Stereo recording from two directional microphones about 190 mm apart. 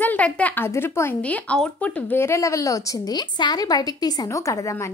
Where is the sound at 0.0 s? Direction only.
10° left (ahead or behind).